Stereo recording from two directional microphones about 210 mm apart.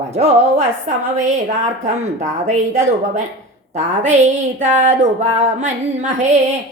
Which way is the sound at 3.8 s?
35° right (ahead or behind).